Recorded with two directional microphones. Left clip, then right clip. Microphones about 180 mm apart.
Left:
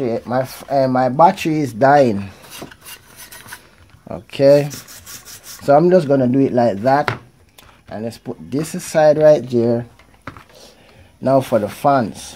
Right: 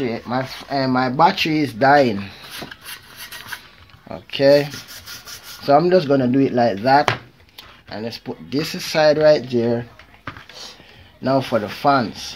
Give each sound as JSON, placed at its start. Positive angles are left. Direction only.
{"t": 0.0, "sound": "speech", "side_deg": 55}
{"t": 4.1, "sound": "speech", "side_deg": 65}
{"t": 11.2, "sound": "speech", "side_deg": 55}